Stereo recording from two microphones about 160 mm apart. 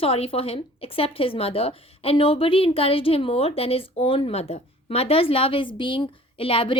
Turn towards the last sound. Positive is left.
turn(degrees=35)  # may be behind; listen again after turning